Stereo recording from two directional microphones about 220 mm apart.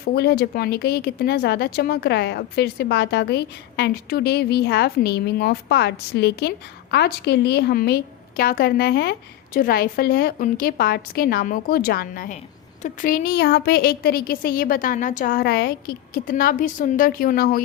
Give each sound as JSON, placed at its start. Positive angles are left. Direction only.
{"t": 0.0, "sound": "a woman's voice", "side_deg": 45}